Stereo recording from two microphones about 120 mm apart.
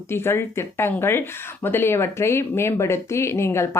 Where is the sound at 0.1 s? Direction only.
20° left (ahead or behind).